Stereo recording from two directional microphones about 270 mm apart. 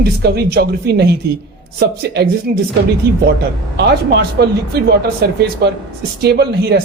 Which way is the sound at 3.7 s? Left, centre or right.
Right.